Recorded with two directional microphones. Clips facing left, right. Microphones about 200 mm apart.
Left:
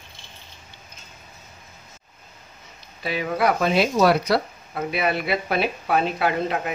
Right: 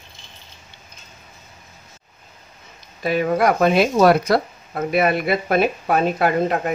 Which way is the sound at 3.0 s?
50° right (ahead or behind).